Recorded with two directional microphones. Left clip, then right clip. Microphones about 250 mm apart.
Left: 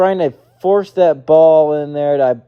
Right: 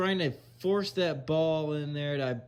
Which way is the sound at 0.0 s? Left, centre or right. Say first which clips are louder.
Left 16 dB; centre.